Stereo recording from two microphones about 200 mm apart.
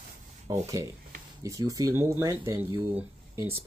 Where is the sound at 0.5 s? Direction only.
15° right (ahead or behind).